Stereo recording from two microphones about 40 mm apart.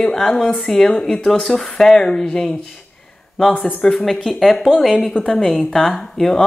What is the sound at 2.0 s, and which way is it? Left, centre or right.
Speech, centre.